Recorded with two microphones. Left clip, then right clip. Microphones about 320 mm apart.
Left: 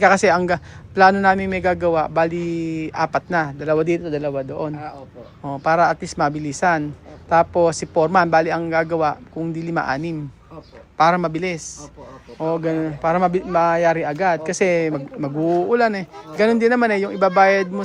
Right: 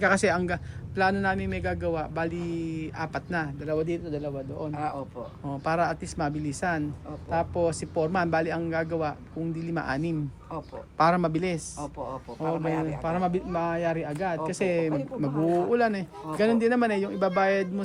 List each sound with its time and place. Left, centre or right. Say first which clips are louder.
0.0 s speech: left 9 dB; centre
5.5 s speech: left 10 dB; centre
13.0 s speech: left 10 dB; centre